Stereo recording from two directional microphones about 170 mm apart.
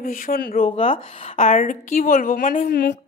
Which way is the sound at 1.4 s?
50° left (ahead or behind).